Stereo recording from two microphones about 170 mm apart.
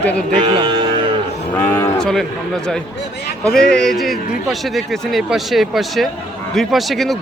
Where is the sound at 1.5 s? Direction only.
10° left (ahead or behind).